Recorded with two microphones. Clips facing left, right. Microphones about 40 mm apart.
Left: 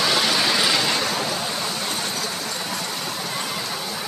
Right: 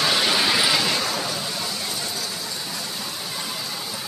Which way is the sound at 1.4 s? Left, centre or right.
Left.